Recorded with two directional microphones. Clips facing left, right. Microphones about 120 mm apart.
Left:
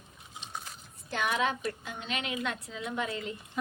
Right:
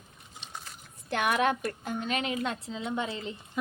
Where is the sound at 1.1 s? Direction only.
60° right (ahead or behind); by 3.4 s 25° right (ahead or behind).